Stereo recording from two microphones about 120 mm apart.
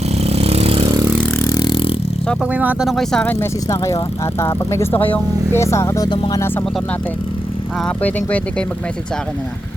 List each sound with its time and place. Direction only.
0.2 s vehicle: 60° right (ahead or behind)
1.5 s vehicle: 35° left (ahead or behind)
2.4 s speech: 10° right (ahead or behind)
2.8 s speech: centre (ahead or behind)
3.2 s speech: 20° left (ahead or behind)
6.1 s speech: 40° left (ahead or behind)
7.9 s speech: 10° left (ahead or behind)